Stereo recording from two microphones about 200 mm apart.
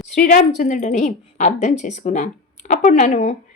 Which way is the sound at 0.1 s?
35° left (ahead or behind).